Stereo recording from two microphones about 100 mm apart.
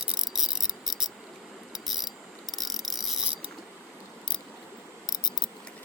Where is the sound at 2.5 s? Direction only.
Centre (ahead or behind).